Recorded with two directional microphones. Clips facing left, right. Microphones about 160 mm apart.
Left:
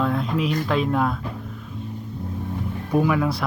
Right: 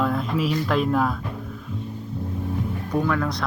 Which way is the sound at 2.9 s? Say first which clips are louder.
Left 4 dB; 10° left (ahead or behind).